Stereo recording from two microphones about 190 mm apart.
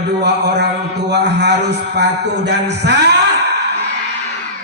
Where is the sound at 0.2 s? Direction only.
60° right (ahead or behind).